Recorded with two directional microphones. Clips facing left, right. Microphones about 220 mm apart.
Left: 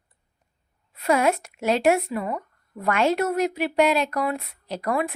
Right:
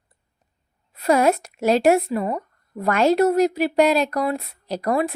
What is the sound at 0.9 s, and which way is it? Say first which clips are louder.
Speech: right 3 dB; 40° right (ahead or behind).